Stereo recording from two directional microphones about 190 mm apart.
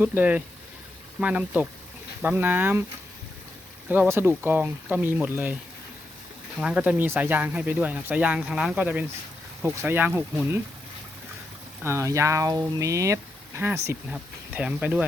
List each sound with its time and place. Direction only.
0.0 s speech: 10° right (ahead or behind)
3.8 s speech: 10° right (ahead or behind)
6.6 s speech: 5° right (ahead or behind)
11.9 s speech: 15° right (ahead or behind)